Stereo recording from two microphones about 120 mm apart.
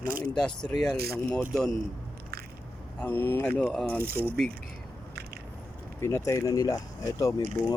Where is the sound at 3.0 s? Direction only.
15° left (ahead or behind).